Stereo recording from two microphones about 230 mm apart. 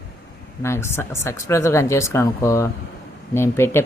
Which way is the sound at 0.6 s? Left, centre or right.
Centre.